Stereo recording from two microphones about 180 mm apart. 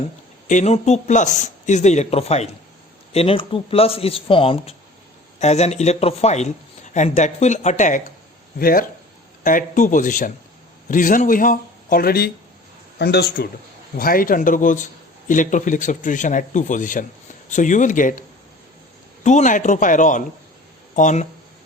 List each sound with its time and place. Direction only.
0.4 s a man's voice: 40° left (ahead or behind)
19.2 s speech: 40° left (ahead or behind)